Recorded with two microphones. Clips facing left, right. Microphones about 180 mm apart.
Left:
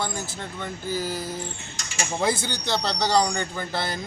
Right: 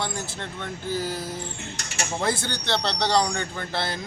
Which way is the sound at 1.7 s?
65° right (ahead or behind).